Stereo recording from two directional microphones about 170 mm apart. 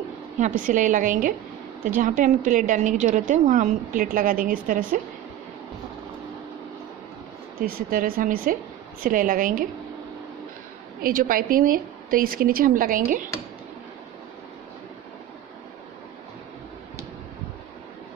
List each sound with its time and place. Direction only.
0.4 s a woman's voice: 50° right (ahead or behind)
7.6 s a woman's voice: 55° right (ahead or behind)
11.0 s a woman's voice: 55° right (ahead or behind)